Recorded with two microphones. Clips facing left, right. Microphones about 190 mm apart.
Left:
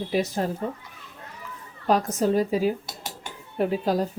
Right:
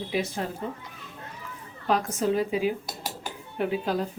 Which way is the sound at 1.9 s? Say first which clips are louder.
Left 3 dB; 40° left (ahead or behind).